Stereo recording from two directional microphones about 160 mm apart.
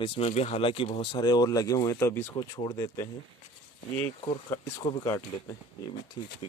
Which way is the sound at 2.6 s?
25° left (ahead or behind).